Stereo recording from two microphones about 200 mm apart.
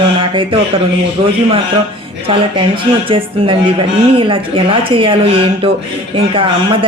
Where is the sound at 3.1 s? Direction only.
25° right (ahead or behind).